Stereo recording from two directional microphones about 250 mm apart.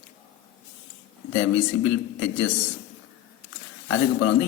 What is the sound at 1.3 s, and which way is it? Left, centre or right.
A man's voice, left.